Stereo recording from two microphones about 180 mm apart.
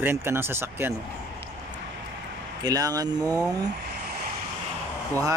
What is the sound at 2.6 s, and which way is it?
Speech, 20° right (ahead or behind).